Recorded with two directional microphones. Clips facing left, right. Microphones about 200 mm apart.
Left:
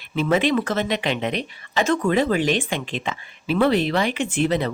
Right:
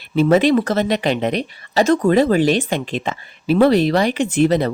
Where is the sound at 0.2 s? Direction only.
40° right (ahead or behind).